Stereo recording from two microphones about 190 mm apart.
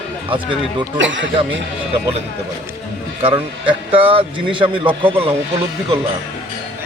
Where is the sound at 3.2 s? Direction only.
30° right (ahead or behind).